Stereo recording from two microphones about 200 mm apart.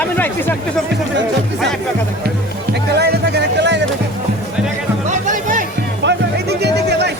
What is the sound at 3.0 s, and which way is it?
Music, 55° right (ahead or behind).